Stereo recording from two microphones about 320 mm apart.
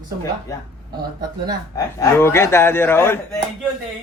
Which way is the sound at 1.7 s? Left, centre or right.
Centre.